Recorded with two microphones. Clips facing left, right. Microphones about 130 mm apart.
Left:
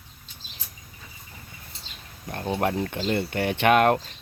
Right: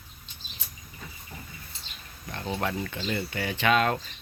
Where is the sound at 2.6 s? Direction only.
45° left (ahead or behind).